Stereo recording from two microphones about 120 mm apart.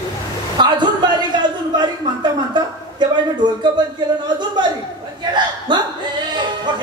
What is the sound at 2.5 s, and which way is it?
Speech, 40° right (ahead or behind).